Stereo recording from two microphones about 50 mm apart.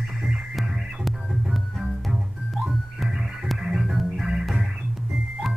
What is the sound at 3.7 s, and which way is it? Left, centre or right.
Music, centre.